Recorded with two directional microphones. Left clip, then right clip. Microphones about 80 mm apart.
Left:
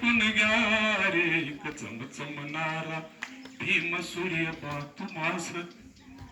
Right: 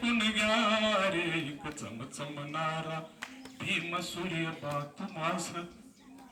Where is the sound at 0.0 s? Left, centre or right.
Right.